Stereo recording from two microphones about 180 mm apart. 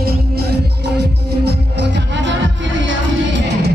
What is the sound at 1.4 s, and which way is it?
Music, 75° right (ahead or behind).